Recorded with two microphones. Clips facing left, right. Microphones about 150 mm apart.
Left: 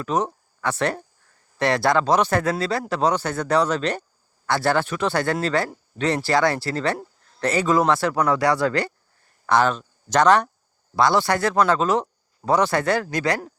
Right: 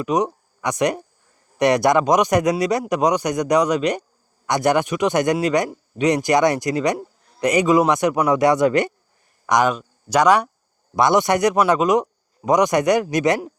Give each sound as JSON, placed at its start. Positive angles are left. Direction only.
{"t": 0.0, "sound": "speech", "side_deg": -15}